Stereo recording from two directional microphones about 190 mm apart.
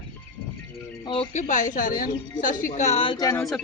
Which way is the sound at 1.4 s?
40° left (ahead or behind).